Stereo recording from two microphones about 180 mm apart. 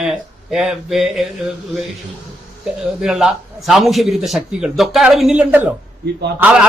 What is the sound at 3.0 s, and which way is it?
A man's voice, 5° right (ahead or behind).